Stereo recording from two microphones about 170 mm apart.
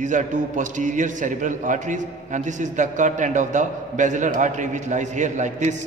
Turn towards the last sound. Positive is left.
turn(degrees=-45)  # may be behind; listen again after turning